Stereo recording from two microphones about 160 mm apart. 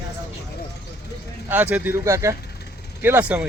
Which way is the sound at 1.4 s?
10° right (ahead or behind).